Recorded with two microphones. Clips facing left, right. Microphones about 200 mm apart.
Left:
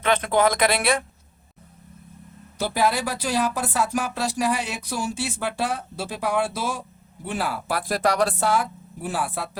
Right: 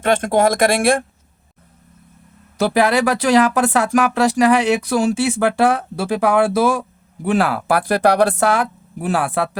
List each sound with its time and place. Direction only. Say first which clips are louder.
0.0 s speech: right 5 dB; 45° right (ahead or behind)
2.6 s speech: right 8 dB; 75° right (ahead or behind)